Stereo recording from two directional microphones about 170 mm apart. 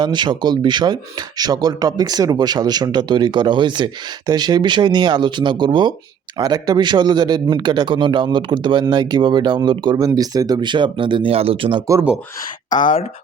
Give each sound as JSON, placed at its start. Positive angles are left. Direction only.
{"t": 0.0, "sound": "a man's voice", "side_deg": -25}
{"t": 12.7, "sound": "speech", "side_deg": 50}